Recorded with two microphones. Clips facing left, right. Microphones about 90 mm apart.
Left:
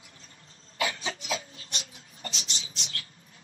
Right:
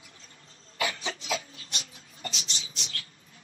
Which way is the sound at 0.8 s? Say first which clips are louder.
Even; 35° left (ahead or behind).